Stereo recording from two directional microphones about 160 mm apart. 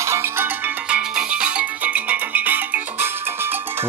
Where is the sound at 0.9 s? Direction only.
5° right (ahead or behind).